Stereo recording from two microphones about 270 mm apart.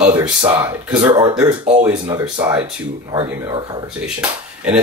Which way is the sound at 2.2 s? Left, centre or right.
Centre.